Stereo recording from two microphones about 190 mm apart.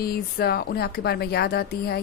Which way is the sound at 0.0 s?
55° left (ahead or behind).